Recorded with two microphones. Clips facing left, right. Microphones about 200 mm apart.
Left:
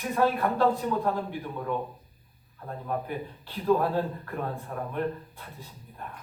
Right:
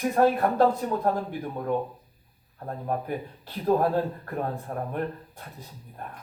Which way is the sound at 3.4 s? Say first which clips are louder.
Right 1 dB; 40° right (ahead or behind).